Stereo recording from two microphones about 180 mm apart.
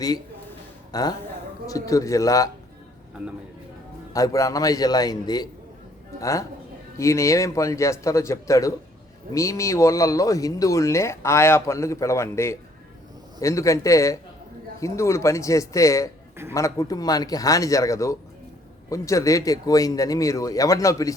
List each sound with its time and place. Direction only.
0.9 s speech: 20° left (ahead or behind)
4.1 s speech: 20° left (ahead or behind)